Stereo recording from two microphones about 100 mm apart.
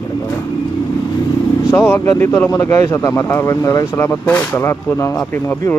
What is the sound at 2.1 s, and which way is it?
Speech, 30° left (ahead or behind).